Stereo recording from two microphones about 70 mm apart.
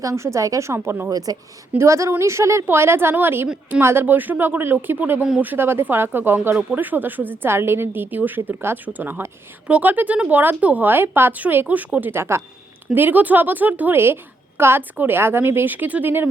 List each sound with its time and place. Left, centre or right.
0.0 s a woman's voice: right
1.1 s speech: right
1.8 s a woman's voice: right